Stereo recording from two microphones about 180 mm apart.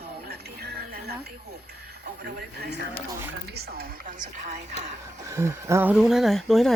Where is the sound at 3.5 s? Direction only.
55° right (ahead or behind).